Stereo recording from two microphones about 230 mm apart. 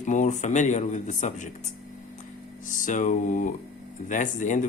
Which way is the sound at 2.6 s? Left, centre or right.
Left.